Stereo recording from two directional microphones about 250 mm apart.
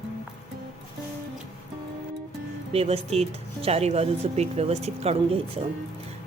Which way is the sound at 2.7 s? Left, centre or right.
Right.